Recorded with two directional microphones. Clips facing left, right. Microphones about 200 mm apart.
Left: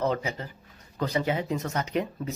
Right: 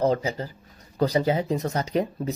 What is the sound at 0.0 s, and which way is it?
Speech, 35° right (ahead or behind).